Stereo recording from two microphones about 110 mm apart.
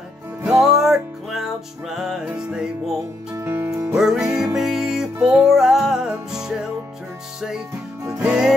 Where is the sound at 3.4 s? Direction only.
20° right (ahead or behind).